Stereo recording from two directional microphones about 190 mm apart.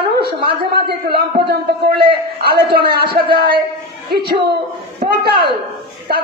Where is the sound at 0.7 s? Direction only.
55° right (ahead or behind).